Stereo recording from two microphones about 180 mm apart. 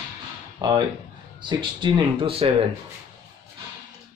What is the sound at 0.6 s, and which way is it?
Speech, 25° right (ahead or behind).